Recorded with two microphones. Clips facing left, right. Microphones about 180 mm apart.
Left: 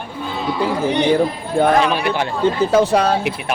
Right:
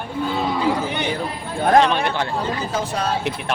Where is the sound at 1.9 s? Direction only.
5° left (ahead or behind).